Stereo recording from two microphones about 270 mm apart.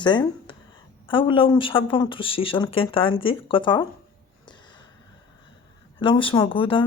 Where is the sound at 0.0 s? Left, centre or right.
Centre.